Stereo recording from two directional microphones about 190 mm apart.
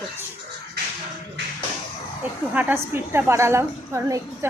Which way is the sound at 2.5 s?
10° right (ahead or behind).